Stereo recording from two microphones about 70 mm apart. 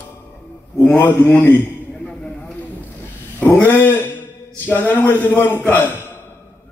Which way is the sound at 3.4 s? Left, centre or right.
Left.